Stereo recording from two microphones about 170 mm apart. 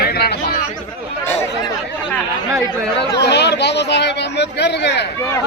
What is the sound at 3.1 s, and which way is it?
Speech, 80° left.